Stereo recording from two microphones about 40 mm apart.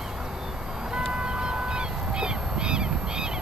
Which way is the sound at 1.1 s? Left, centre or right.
Right.